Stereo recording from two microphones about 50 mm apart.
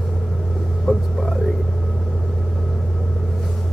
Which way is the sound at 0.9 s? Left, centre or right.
Centre.